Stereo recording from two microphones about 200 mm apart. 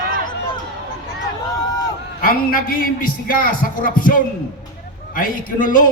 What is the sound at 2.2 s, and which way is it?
A man's voice, 45° left (ahead or behind).